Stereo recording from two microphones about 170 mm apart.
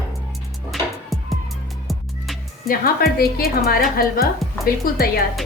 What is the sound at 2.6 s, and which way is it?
Speech, 60° left (ahead or behind).